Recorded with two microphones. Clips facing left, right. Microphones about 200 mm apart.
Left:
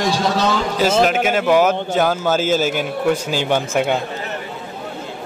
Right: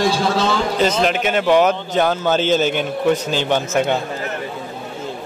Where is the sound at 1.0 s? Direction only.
5° left (ahead or behind).